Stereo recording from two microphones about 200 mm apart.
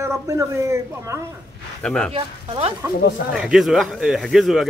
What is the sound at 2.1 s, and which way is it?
Speech, 30° right (ahead or behind).